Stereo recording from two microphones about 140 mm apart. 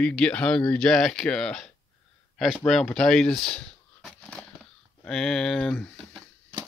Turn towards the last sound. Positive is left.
turn(degrees=0)  # may be behind; listen again after turning